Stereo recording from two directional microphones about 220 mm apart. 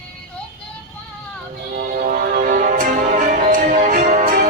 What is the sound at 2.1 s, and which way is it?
Music, 40° right (ahead or behind).